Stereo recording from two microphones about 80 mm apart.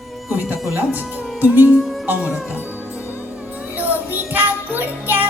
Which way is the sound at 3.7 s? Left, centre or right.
Right.